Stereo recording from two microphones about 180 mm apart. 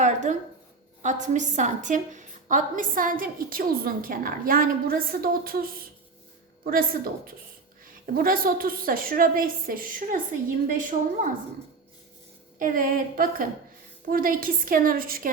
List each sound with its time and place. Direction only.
0.0 s a sound: 40° right (ahead or behind)
1.0 s a woman's voice: 40° right (ahead or behind)
6.7 s a woman's voice: 55° right (ahead or behind)
12.5 s a woman's voice: 50° right (ahead or behind)